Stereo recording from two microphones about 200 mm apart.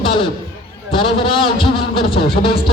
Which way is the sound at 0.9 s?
25° left (ahead or behind).